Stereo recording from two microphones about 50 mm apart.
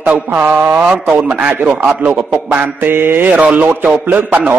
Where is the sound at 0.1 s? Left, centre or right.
Right.